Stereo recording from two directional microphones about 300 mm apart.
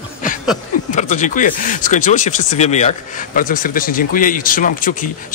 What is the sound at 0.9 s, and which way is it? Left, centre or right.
Speech, left.